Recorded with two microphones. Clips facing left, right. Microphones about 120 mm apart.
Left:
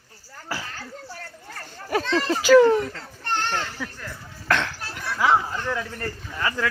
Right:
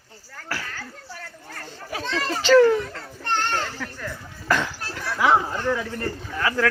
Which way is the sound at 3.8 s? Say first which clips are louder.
Right 2 dB; 5° left (ahead or behind).